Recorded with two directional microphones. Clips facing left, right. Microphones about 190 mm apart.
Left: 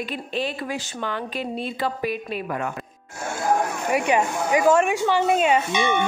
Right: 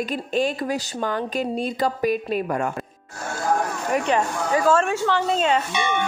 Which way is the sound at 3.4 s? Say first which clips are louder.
Left 1 dB; 10° left (ahead or behind).